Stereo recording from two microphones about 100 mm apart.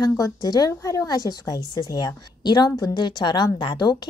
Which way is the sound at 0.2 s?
40° left (ahead or behind).